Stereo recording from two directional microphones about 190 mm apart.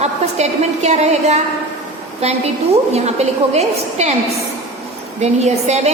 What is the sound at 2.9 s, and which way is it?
A woman's voice, 35° right (ahead or behind).